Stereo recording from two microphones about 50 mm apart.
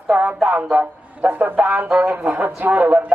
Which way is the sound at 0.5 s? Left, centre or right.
Right.